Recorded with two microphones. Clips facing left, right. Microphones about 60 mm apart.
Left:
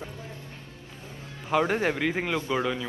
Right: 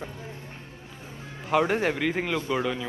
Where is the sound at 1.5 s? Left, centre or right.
Centre.